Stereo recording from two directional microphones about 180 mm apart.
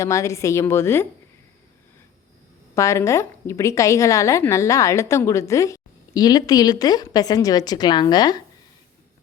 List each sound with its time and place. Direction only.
0.0 s a woman's voice: 15° left (ahead or behind)
2.7 s a woman's voice: 15° left (ahead or behind)